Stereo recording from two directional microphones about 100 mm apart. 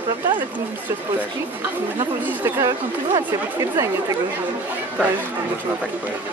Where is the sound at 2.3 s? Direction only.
25° right (ahead or behind).